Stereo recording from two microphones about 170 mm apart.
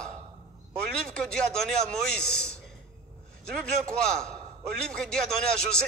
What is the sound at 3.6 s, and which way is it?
A man's voice, 5° left (ahead or behind).